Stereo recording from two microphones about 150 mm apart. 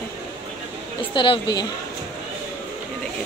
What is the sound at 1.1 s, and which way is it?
Speech, 30° left (ahead or behind).